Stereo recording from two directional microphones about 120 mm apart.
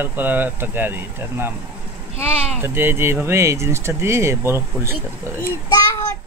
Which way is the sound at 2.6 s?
20° right (ahead or behind).